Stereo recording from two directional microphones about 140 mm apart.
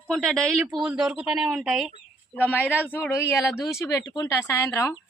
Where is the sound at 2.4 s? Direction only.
10° left (ahead or behind).